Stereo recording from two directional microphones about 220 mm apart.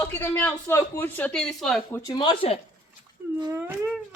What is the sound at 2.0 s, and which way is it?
Speech, 20° left (ahead or behind).